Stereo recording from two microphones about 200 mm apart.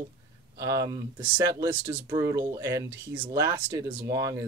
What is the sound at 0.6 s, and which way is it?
Speech, 15° right (ahead or behind).